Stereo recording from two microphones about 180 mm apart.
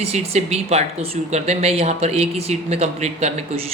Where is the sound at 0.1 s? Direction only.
35° right (ahead or behind).